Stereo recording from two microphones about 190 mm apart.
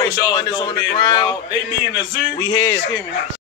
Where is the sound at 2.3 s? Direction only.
20° left (ahead or behind).